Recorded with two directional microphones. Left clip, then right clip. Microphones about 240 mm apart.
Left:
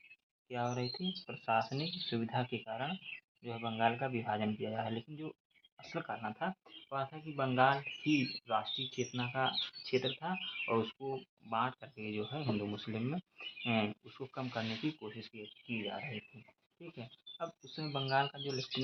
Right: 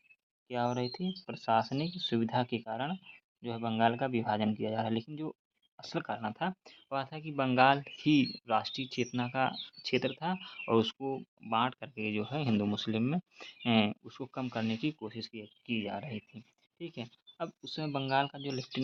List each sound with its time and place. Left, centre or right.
0.4 s speech: right
17.3 s speech: right